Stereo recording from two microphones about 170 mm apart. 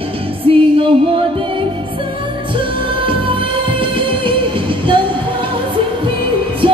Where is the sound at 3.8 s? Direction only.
30° right (ahead or behind).